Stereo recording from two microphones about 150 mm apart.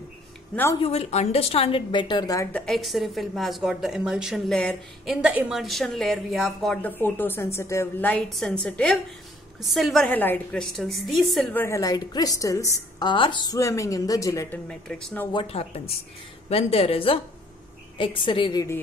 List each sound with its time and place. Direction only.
0.7 s a woman's voice: 45° left (ahead or behind); by 2.5 s 20° left (ahead or behind)
2.5 s a woman's voice: 5° left (ahead or behind)
6.8 s a woman's voice: 15° left (ahead or behind)
10.0 s a woman's voice: 10° left (ahead or behind)
11.5 s a woman's voice: 20° left (ahead or behind)
14.7 s a woman's voice: 5° left (ahead or behind)
15.3 s a woman's voice: 40° left (ahead or behind); by 18.8 s 25° left (ahead or behind)